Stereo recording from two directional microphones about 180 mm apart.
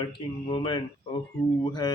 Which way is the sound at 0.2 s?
25° left (ahead or behind).